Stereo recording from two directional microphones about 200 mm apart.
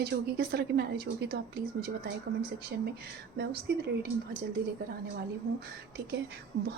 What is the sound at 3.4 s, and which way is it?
Speech, 55° right (ahead or behind).